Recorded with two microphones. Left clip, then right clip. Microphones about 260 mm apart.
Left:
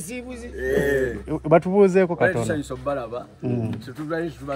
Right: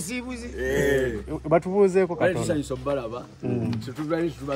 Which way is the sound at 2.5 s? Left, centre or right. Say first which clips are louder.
Even; centre.